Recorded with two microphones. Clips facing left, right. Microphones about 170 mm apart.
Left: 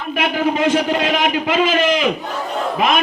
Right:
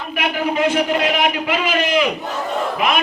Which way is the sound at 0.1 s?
25° left (ahead or behind).